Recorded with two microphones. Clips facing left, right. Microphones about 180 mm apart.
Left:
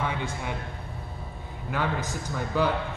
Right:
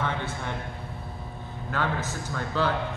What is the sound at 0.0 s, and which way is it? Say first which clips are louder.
Speech: even; 10° left (ahead or behind).